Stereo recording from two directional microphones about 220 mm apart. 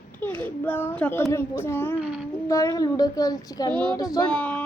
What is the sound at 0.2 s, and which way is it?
Speech, 5° left (ahead or behind).